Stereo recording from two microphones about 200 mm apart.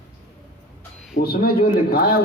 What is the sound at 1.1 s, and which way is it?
Speech, 50° left (ahead or behind).